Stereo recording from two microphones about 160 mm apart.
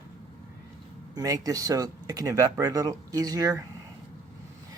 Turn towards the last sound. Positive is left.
turn(degrees=-20)  # may be behind; listen again after turning